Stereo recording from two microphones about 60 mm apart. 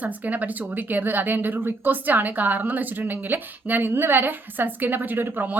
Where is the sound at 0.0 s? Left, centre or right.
Right.